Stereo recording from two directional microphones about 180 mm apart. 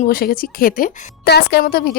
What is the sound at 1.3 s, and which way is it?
Speech, 65° left (ahead or behind).